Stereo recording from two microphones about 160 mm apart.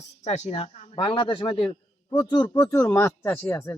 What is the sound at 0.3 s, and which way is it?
A man's voice, 40° left (ahead or behind).